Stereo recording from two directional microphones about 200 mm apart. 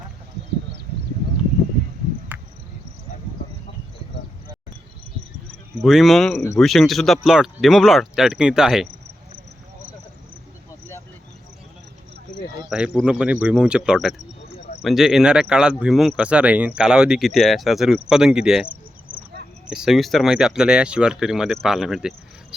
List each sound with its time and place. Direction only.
2.3 s cricket: 10° right (ahead or behind)
5.8 s speech: centre (ahead or behind)
13.0 s speech: 5° right (ahead or behind)
19.7 s speech: centre (ahead or behind)